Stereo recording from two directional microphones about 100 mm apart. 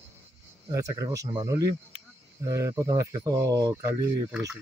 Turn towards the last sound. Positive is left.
turn(degrees=-35)  # may be behind; listen again after turning